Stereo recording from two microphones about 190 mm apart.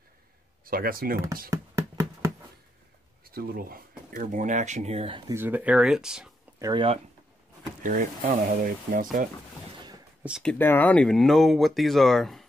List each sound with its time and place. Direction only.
0.7 s speech: 50° right (ahead or behind)
1.5 s a sound: 15° right (ahead or behind)
3.3 s speech: 50° right (ahead or behind); by 5.2 s 30° right (ahead or behind)
5.3 s speech: 10° right (ahead or behind)
6.6 s speech: 25° right (ahead or behind)
7.8 s speech: 45° right (ahead or behind)
10.2 s speech: 5° right (ahead or behind)
10.5 s speech: 10° left (ahead or behind)